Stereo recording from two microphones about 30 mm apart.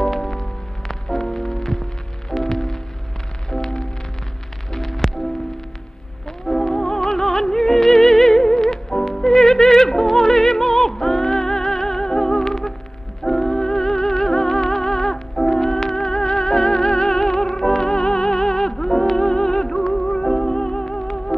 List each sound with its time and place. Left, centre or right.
0.2 s music: centre
4.7 s music: centre
6.4 s music: centre